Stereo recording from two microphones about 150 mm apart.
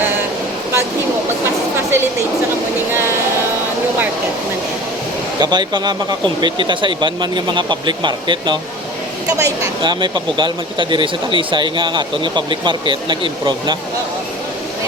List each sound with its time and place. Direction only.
5.4 s speech: 30° right (ahead or behind)